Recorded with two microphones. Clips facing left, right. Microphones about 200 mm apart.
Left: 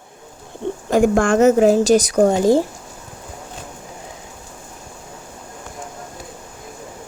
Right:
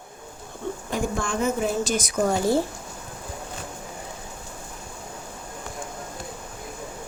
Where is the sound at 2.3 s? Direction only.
15° left (ahead or behind).